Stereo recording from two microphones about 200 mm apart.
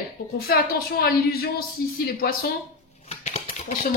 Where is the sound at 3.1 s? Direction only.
35° left (ahead or behind).